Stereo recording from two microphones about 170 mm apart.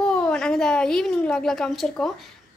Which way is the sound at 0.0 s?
5° left (ahead or behind).